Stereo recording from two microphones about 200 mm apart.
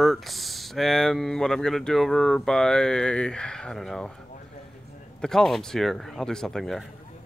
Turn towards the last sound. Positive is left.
turn(degrees=0)  # may be behind; listen again after turning